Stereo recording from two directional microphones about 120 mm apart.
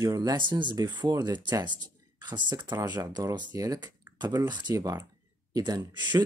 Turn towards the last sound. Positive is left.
turn(degrees=-40)  # may be behind; listen again after turning